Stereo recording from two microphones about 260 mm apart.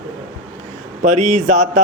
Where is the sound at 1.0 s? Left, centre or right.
Right.